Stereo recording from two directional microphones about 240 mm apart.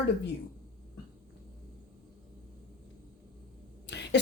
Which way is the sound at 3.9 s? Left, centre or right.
Left.